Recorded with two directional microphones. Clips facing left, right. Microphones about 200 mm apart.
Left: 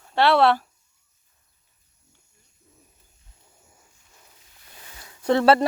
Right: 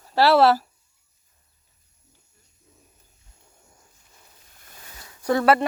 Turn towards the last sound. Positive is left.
turn(degrees=30)  # may be behind; listen again after turning